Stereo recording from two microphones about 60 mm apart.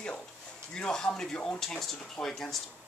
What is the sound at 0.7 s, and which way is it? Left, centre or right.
Speech, centre.